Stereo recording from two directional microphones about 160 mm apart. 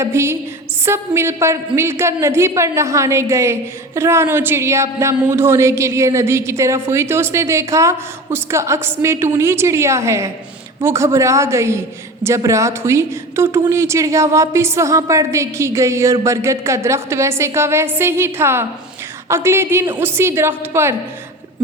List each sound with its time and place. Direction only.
0.0 s a woman's voice: 15° right (ahead or behind)